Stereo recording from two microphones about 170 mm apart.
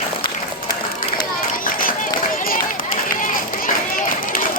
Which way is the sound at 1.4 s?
55° left (ahead or behind).